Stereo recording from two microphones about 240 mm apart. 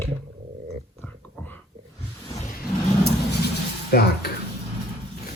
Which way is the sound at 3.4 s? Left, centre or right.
Left.